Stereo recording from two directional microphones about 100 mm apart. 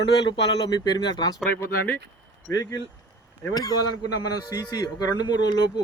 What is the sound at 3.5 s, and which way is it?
A man's voice, 40° left (ahead or behind).